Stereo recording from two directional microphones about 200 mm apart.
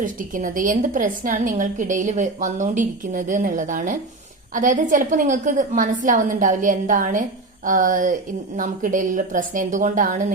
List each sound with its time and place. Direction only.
0.0 s a woman's voice: 40° right (ahead or behind)